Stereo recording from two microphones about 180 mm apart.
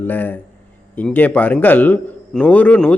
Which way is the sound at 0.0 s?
10° left (ahead or behind).